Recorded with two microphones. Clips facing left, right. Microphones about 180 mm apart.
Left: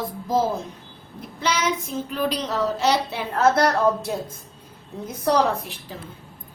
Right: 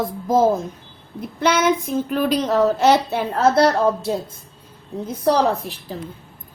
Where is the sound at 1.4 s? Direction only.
55° right (ahead or behind).